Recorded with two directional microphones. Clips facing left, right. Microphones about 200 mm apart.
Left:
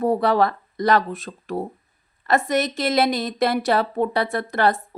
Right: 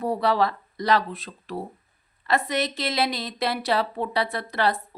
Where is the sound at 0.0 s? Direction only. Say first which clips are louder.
Left 4 dB; 50° left (ahead or behind).